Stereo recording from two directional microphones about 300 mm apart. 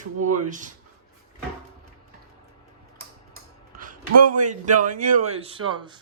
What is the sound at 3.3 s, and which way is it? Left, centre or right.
Speech, right.